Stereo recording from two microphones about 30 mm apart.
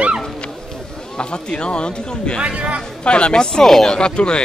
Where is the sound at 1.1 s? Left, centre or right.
Left.